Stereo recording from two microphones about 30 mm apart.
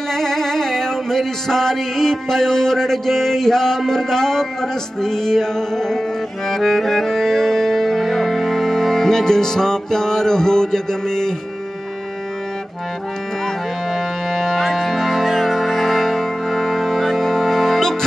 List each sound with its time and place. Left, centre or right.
0.1 s a sound: centre
6.5 s music: centre
13.9 s music: centre